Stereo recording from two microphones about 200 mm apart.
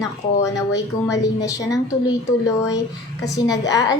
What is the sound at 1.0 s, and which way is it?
Speech, 15° left (ahead or behind).